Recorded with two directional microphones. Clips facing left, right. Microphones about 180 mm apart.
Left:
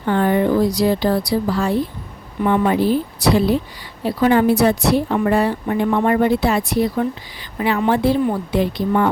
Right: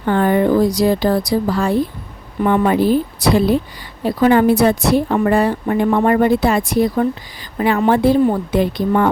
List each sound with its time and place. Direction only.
0.1 s speech: 50° right (ahead or behind)